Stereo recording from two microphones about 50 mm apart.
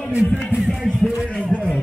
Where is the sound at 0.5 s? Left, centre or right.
Centre.